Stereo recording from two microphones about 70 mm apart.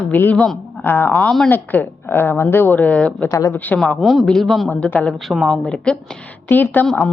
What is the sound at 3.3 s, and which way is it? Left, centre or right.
Speech, left.